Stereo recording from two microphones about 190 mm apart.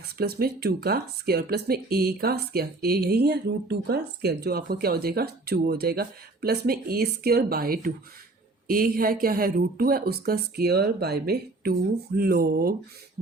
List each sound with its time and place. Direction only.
0.2 s speech: 55° right (ahead or behind)